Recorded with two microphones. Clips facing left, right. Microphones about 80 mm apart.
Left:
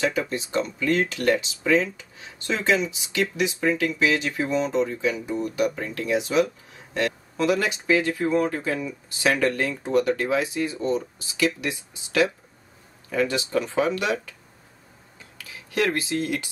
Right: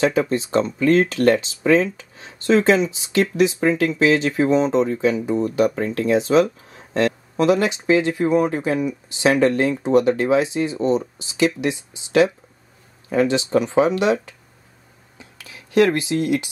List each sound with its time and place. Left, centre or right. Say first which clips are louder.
0.0 s speech: right 6 dB; right
7.3 s speech: right 5 dB; right
15.1 s a sound: right 1 dB; right